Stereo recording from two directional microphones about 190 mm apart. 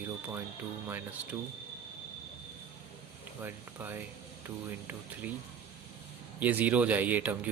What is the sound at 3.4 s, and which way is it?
Speech, 10° right (ahead or behind).